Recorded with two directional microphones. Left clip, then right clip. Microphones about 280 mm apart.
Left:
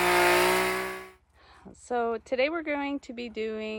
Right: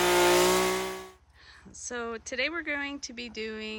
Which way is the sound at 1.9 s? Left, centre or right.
Centre.